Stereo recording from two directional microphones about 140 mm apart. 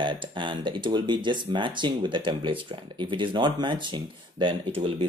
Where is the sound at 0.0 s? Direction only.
35° right (ahead or behind).